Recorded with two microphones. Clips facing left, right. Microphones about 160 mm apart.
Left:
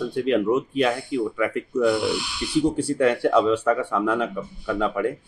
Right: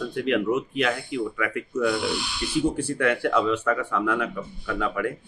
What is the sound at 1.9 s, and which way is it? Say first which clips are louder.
Speech: left 3 dB; 5° left (ahead or behind).